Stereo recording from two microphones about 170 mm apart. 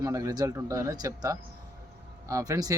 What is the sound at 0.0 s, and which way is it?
A man's voice, 20° right (ahead or behind).